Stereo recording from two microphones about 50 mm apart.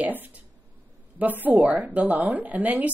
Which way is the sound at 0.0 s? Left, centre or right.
Right.